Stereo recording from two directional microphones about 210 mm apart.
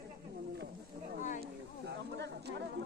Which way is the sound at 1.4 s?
50° right (ahead or behind).